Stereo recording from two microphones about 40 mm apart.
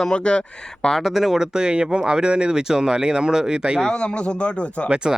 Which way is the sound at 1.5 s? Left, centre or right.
Right.